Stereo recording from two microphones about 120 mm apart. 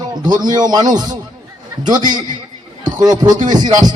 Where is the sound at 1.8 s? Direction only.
90° right.